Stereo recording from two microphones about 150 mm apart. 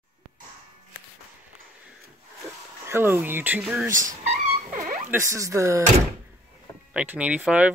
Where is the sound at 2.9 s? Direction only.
15° right (ahead or behind).